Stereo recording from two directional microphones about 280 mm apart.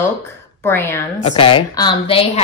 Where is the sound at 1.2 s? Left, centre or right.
Centre.